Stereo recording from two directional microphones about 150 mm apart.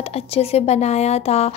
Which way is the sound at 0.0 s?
40° left (ahead or behind).